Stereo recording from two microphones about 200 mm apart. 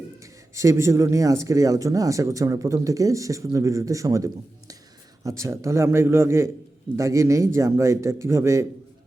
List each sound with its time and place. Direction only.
0.2 s speech: 15° right (ahead or behind)